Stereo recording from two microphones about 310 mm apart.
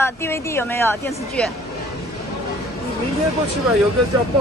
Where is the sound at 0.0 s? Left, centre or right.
Centre.